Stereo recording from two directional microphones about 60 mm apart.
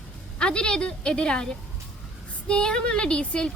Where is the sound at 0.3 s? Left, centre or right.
Centre.